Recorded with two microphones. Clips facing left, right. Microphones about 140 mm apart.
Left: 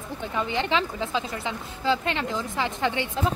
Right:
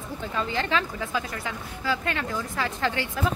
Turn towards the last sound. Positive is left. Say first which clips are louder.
# left 1 dB
turn(degrees=20)  # may be behind; listen again after turning